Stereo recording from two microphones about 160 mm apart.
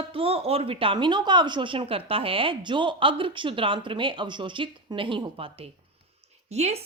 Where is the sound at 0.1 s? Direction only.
35° right (ahead or behind).